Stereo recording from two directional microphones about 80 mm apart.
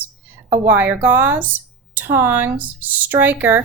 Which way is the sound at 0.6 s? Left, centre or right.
Right.